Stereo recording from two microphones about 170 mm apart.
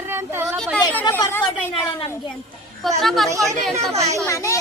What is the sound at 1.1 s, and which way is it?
Speech, 15° left (ahead or behind).